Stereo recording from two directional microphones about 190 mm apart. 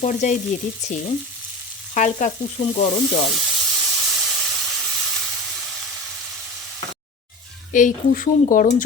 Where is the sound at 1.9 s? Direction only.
40° left (ahead or behind).